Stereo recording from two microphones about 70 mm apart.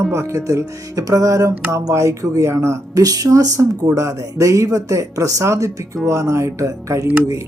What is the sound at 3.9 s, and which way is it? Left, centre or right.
Speech, right.